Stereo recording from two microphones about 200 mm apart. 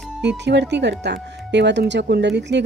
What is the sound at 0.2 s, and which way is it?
Speech, 60° right (ahead or behind).